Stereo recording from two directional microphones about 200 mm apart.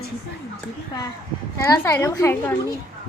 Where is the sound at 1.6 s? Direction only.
10° left (ahead or behind).